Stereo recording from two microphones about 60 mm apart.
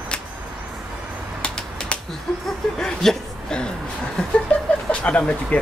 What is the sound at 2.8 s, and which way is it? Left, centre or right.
Speech, centre.